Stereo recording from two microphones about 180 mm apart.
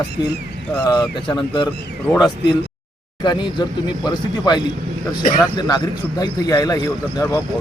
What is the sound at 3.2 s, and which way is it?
Speech, 25° left (ahead or behind).